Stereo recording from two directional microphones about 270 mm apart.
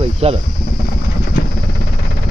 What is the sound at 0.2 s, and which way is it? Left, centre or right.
Speech, right.